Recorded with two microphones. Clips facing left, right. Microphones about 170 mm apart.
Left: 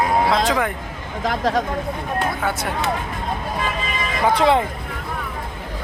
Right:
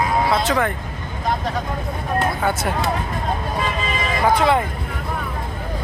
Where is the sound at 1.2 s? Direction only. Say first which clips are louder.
Left 3 dB; 90° left.